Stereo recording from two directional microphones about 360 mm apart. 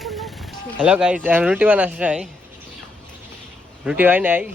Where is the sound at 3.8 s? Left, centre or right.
Centre.